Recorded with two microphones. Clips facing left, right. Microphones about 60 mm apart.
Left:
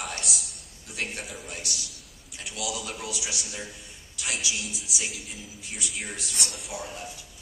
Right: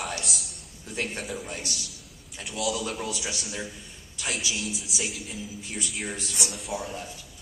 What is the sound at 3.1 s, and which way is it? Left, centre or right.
Speech, right.